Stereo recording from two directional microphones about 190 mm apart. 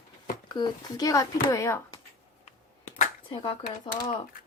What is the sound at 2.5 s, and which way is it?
Computer keyboard, 40° left (ahead or behind).